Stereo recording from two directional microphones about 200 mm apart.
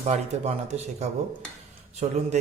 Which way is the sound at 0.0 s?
35° right (ahead or behind).